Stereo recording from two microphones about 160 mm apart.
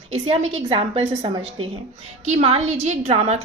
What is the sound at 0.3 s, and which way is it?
A woman's voice, 40° right (ahead or behind).